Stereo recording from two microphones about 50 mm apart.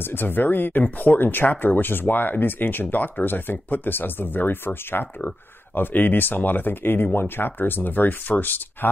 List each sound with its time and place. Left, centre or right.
0.0 s speech: left